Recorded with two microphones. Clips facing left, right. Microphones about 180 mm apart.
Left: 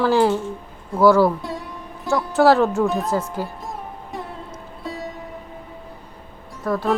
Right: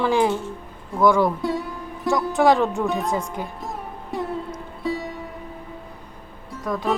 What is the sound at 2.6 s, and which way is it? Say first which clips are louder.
Speech: left 3 dB; centre (ahead or behind).